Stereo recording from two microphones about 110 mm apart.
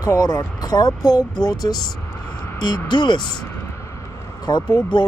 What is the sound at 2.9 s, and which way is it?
Speech, 45° left (ahead or behind).